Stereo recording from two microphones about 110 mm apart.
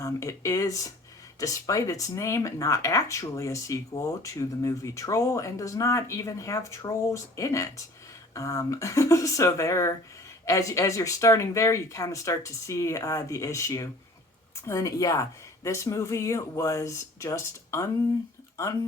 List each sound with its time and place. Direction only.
0.0 s speech: 30° left (ahead or behind)